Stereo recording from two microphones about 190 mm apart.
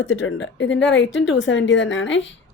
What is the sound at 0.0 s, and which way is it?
Speech, 85° left.